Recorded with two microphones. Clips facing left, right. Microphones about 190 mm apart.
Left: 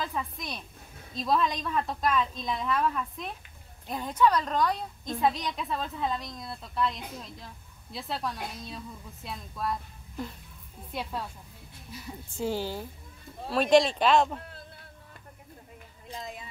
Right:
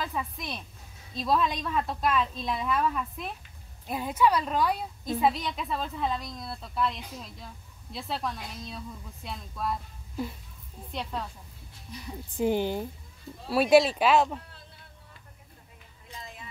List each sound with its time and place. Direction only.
0.0 s a woman's voice: centre (ahead or behind)
12.4 s a woman's voice: 20° right (ahead or behind)
13.5 s speech: 10° right (ahead or behind)